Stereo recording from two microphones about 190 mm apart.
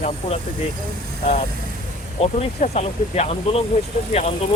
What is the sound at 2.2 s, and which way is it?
Speech, 35° left (ahead or behind).